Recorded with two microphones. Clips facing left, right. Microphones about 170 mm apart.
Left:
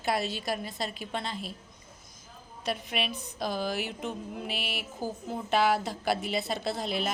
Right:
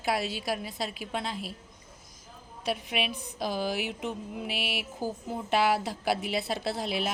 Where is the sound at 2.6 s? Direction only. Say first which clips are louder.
Right 1 dB; 10° right (ahead or behind).